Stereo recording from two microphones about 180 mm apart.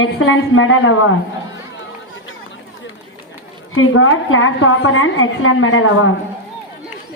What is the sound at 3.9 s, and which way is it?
A woman's voice, 90° left.